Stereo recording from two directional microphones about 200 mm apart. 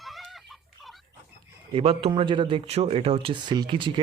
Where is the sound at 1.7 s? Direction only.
30° right (ahead or behind).